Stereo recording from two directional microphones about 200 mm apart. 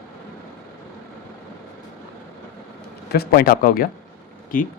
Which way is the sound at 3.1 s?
45° left (ahead or behind).